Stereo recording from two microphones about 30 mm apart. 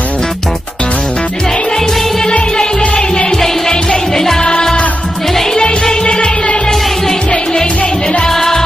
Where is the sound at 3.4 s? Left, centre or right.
Centre.